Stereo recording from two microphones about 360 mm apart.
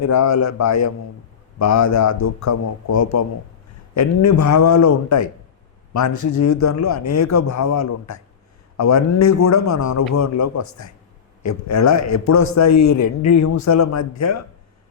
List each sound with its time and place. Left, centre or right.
0.0 s a man's voice: left